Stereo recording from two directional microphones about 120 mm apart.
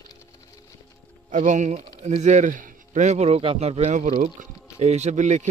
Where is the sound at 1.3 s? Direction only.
90° right.